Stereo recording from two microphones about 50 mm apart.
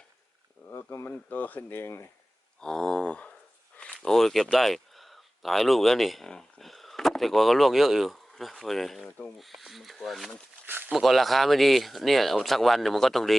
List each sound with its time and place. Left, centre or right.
1.3 s speech: left
1.7 s speech: left
2.6 s speech: centre
3.8 s a sound: centre
4.1 s speech: centre
9.0 s speech: left
9.4 s speech: centre